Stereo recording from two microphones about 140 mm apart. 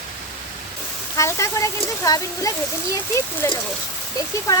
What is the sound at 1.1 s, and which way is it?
Speech, 20° left (ahead or behind).